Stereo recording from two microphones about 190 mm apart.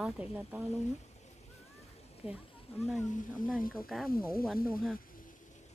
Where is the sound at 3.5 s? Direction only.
50° left (ahead or behind).